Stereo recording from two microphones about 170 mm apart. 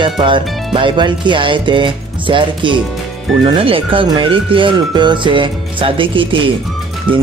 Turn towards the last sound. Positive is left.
turn(degrees=-30)  # may be behind; listen again after turning